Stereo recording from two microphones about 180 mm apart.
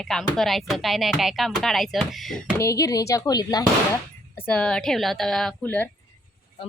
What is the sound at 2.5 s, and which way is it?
Speech, 15° left (ahead or behind).